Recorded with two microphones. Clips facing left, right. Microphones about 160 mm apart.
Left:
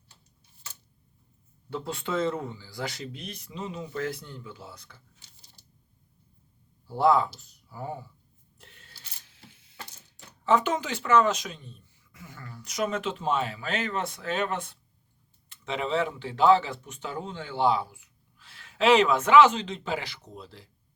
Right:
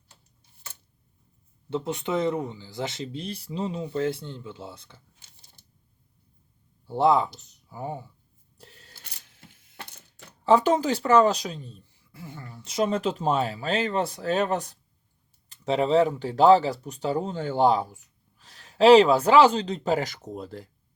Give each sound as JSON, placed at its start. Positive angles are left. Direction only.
{"t": 1.7, "sound": "speech", "side_deg": -20}
{"t": 6.8, "sound": "speech", "side_deg": -20}
{"t": 8.5, "sound": "a sound", "side_deg": -35}
{"t": 10.4, "sound": "speech", "side_deg": -35}